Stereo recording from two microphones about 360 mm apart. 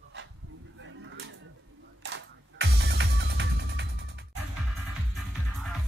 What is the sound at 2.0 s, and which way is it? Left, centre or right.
Music, right.